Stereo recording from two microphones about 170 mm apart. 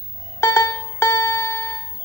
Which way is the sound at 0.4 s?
15° left (ahead or behind).